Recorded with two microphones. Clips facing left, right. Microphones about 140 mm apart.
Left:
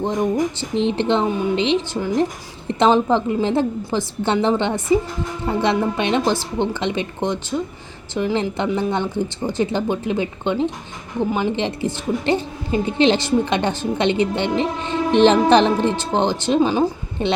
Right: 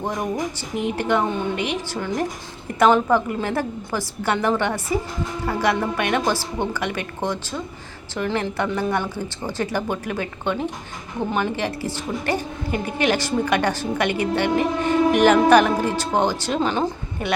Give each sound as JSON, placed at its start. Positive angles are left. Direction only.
{"t": 0.6, "sound": "a woman's voice", "side_deg": 25}
{"t": 17.2, "sound": "a woman's voice", "side_deg": 25}